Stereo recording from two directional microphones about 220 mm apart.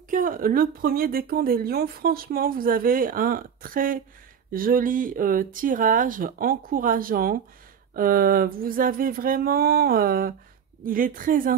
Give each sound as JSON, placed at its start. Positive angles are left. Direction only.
{"t": 0.1, "sound": "speech", "side_deg": -40}